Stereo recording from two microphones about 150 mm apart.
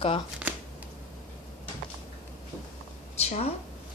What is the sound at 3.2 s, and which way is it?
Speech, 45° left (ahead or behind).